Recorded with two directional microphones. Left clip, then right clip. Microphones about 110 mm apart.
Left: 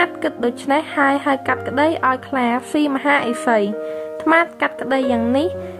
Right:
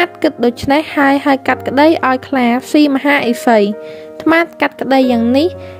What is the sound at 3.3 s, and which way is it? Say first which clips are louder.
Speech: right 6 dB; 60° right (ahead or behind).